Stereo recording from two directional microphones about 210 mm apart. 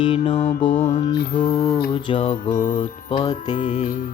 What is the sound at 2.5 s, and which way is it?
Music, 40° left (ahead or behind).